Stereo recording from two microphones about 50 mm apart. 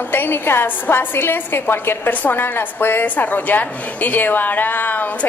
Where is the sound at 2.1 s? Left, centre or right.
Left.